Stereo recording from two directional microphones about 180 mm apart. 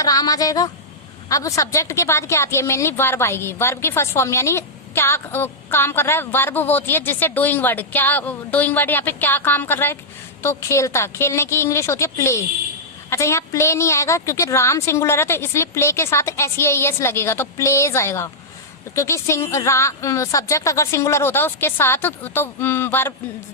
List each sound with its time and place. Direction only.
0.0 s a woman's voice: 20° left (ahead or behind)